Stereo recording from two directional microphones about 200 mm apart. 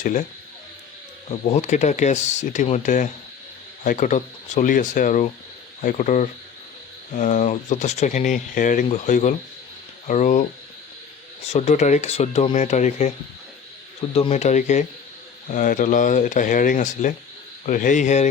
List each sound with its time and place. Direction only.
0.0 s speech: 40° left (ahead or behind)
1.3 s speech: 35° left (ahead or behind)
11.4 s speech: 35° left (ahead or behind)